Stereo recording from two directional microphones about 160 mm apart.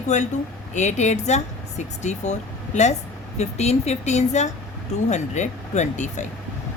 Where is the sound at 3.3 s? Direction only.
45° left (ahead or behind).